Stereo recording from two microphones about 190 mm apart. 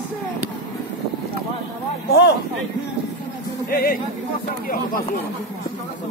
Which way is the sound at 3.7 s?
50° left (ahead or behind).